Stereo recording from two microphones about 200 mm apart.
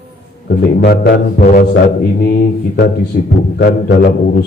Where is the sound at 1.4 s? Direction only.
40° left (ahead or behind).